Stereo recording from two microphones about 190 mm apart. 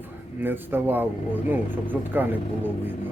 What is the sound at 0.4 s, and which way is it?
Speech, 10° right (ahead or behind).